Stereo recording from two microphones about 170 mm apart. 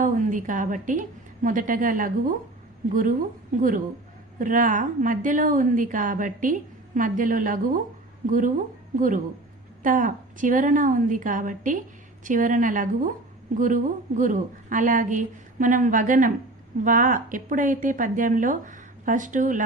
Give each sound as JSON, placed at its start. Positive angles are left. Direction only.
{"t": 0.0, "sound": "a woman's voice", "side_deg": -50}